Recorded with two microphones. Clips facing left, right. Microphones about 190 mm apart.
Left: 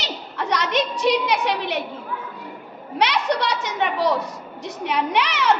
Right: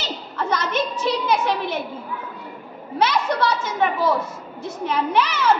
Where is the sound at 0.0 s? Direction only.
75° left (ahead or behind).